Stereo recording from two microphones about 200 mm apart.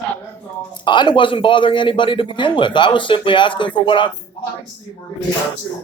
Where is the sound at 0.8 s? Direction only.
25° left (ahead or behind).